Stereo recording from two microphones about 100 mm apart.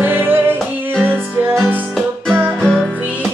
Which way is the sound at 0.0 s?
20° right (ahead or behind).